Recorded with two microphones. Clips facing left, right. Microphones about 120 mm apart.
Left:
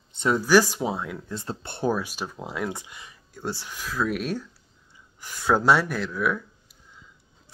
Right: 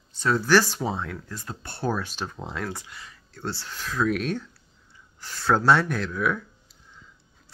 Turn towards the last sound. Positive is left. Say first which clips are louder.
# even
turn(degrees=5)  # may be behind; listen again after turning